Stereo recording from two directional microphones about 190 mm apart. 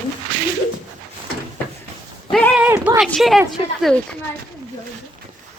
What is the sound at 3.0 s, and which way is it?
Speech, centre (ahead or behind).